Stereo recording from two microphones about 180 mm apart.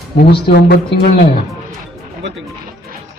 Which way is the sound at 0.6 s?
60° left (ahead or behind).